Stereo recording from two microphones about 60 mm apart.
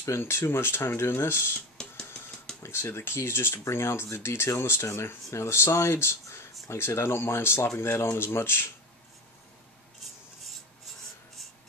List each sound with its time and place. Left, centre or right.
0.0 s speech: left
1.8 s music: centre
2.6 s speech: left